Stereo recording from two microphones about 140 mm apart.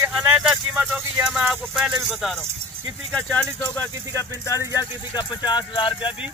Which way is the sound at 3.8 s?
20° left (ahead or behind).